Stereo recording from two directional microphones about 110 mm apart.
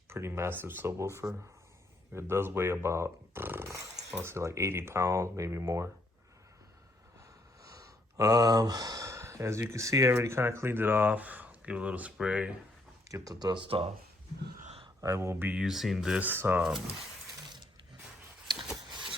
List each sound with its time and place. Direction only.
0.1 s speech: 25° right (ahead or behind)
7.6 s speech: 30° right (ahead or behind); by 12.5 s 10° right (ahead or behind)
13.1 s speech: 30° right (ahead or behind); by 13.9 s 55° right (ahead or behind)
15.0 s speech: 25° right (ahead or behind)
15.6 s speech: 5° right (ahead or behind); by 16.6 s 20° right (ahead or behind)
16.6 s speech: 5° right (ahead or behind)